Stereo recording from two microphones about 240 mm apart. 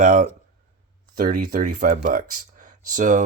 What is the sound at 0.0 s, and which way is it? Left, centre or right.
Speech, right.